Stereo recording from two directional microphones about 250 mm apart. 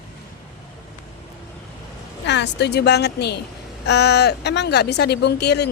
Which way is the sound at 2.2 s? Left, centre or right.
Left.